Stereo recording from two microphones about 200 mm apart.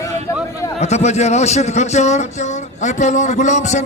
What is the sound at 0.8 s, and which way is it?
Speech, 35° left (ahead or behind).